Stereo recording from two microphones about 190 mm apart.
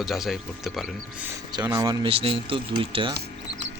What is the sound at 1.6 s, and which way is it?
A man's voice, 20° right (ahead or behind).